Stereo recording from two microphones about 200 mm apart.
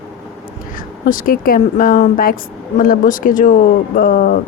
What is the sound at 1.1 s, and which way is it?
A woman's voice, 45° left (ahead or behind).